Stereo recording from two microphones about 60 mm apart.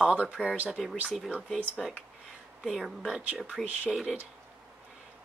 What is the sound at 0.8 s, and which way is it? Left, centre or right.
Speech, centre.